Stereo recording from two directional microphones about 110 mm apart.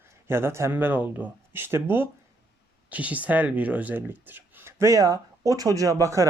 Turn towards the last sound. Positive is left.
turn(degrees=-30)  # may be behind; listen again after turning